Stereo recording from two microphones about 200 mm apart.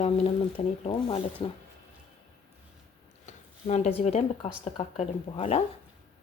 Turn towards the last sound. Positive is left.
turn(degrees=35)  # may be behind; listen again after turning